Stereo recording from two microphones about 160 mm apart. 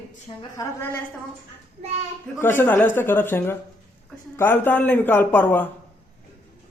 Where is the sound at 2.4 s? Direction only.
15° left (ahead or behind).